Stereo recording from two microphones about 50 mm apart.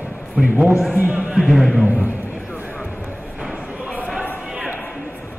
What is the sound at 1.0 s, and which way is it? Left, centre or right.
Speech, right.